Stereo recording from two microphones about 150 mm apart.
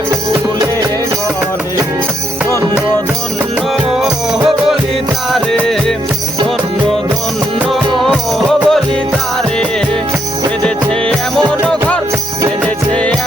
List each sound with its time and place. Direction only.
0.3 s music: 25° right (ahead or behind)
5.3 s music: 5° left (ahead or behind)
7.7 s music: centre (ahead or behind)
11.6 s music: 5° left (ahead or behind)